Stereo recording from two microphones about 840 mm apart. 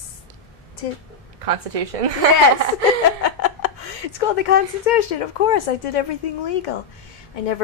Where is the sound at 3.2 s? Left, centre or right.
Left.